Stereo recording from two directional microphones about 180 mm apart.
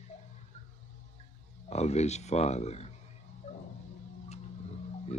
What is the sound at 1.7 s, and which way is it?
Speech, 35° left (ahead or behind).